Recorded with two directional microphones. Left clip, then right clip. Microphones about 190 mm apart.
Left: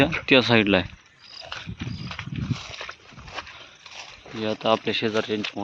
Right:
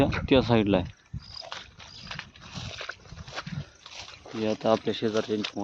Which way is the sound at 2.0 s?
15° left (ahead or behind).